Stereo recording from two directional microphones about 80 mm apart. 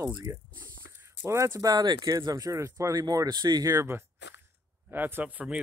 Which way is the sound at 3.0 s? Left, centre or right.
Right.